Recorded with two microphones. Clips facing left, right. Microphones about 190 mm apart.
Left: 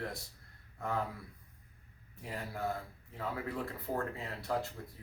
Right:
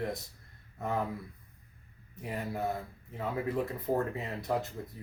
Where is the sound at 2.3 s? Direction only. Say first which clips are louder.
Right 4 dB; 20° right (ahead or behind).